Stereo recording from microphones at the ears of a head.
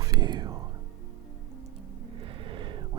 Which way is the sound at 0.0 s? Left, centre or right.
Right.